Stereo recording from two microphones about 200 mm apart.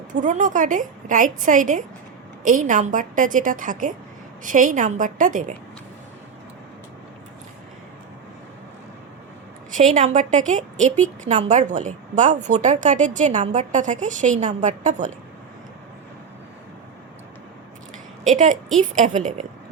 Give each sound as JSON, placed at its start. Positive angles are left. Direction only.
{"t": 0.1, "sound": "a woman's voice", "side_deg": -40}
{"t": 9.7, "sound": "a woman's voice", "side_deg": -40}
{"t": 18.8, "sound": "a woman's voice", "side_deg": -40}